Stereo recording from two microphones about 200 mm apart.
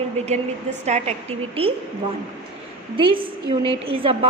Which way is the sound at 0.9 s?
35° right (ahead or behind).